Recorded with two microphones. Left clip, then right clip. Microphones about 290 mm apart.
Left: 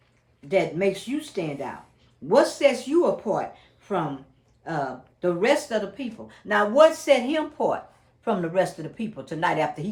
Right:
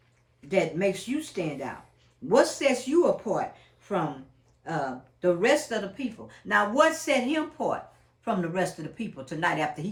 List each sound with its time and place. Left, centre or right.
0.4 s speech: left